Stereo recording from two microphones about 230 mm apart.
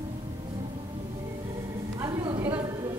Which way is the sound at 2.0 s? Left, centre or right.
Centre.